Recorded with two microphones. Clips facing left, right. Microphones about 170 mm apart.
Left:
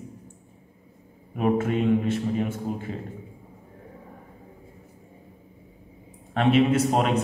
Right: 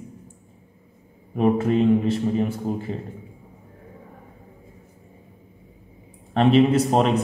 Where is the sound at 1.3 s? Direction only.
30° right (ahead or behind).